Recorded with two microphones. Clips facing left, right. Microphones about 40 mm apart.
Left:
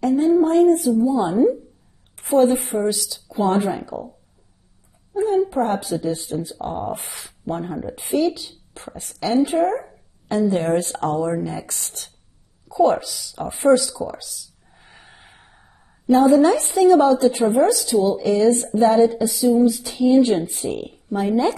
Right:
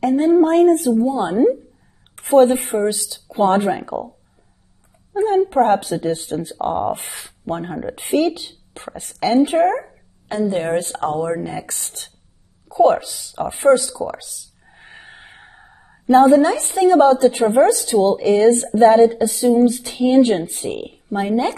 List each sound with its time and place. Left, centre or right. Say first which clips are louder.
0.0 s a woman's voice: right 2 dB; right
1.1 s a woman's voice: right 1 dB; right
2.1 s a woman's voice: right 4 dB; right
5.1 s a woman's voice: right 3 dB; right
7.2 s a woman's voice: right 2 dB; right
9.8 s a sound: left 1 dB; centre
10.5 s a woman's voice: even; centre
12.6 s a sound: right 3 dB; right
12.9 s speech: right 2 dB; right
13.9 s gasp: right 3 dB; right
16.3 s a woman's voice: even; right
16.9 s a woman's voice: right 5 dB; right
20.4 s speech: even; right